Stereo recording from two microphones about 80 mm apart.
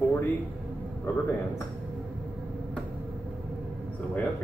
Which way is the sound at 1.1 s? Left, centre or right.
Left.